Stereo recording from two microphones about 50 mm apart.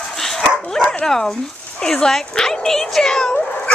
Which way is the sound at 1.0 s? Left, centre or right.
Centre.